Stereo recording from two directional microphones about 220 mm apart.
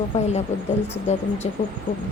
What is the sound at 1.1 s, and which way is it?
Speech, 30° left (ahead or behind).